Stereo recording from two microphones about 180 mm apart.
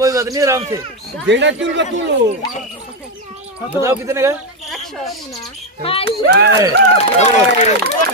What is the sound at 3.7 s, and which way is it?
Speech, 15° right (ahead or behind).